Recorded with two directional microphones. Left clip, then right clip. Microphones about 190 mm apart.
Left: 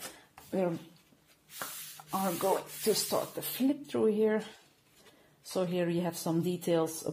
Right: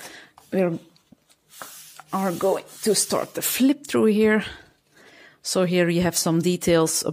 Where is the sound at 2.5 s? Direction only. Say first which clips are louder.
Right 7 dB; 60° right (ahead or behind).